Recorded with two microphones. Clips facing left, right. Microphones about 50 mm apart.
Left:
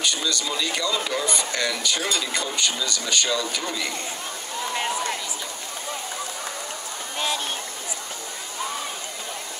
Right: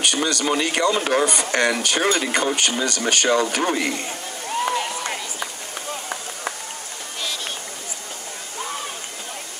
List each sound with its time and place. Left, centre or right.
0.0 s speech: right
2.0 s speech: right